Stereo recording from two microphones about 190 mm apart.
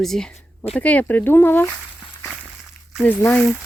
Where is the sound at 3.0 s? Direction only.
10° left (ahead or behind).